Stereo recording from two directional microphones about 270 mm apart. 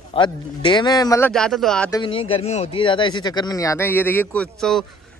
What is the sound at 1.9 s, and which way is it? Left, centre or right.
Speech, centre.